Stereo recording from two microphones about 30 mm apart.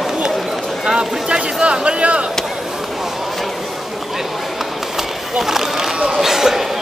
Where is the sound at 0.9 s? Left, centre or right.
Right.